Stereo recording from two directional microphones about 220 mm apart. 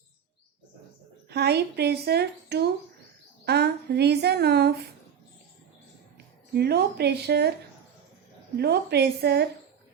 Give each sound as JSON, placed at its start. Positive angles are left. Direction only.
{"t": 1.3, "sound": "speech", "side_deg": -50}
{"t": 6.5, "sound": "speech", "side_deg": -45}
{"t": 8.5, "sound": "speech", "side_deg": -45}